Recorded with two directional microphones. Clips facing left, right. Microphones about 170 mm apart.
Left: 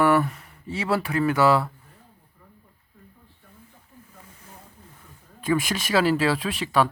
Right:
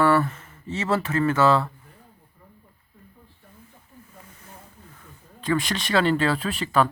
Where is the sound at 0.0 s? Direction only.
15° left (ahead or behind).